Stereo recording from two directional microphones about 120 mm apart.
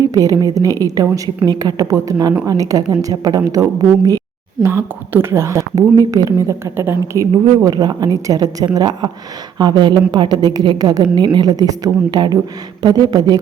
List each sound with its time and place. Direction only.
0.0 s a woman's voice: 30° right (ahead or behind)
4.6 s a woman's voice: 20° right (ahead or behind)